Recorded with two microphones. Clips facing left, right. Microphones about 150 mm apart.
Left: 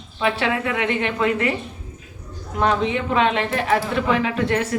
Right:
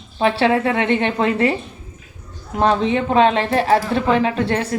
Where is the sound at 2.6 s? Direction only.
35° right (ahead or behind).